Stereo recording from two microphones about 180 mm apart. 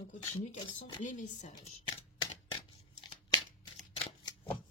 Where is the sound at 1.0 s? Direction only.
40° left (ahead or behind).